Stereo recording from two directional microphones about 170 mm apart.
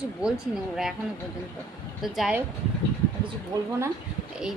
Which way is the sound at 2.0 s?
Centre (ahead or behind).